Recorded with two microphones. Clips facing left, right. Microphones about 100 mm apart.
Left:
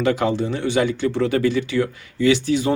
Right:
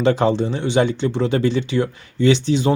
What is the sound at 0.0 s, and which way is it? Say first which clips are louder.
Speech: right 3 dB; 30° right (ahead or behind).